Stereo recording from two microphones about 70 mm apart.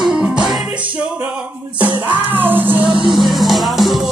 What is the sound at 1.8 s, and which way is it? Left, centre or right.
Music, right.